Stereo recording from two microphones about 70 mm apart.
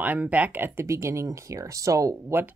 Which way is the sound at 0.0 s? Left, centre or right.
Right.